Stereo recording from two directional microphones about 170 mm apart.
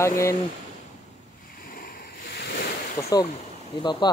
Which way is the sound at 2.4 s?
75° left (ahead or behind).